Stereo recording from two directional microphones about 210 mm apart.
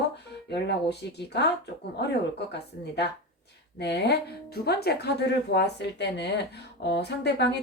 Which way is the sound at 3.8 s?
50° left (ahead or behind).